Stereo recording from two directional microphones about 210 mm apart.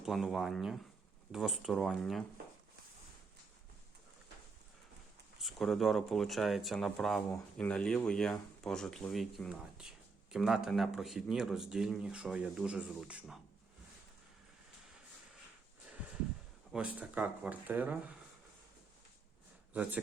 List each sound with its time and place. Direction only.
0.0 s speech: centre (ahead or behind)
5.4 s speech: centre (ahead or behind)
16.7 s speech: 5° right (ahead or behind)
19.7 s speech: 5° right (ahead or behind)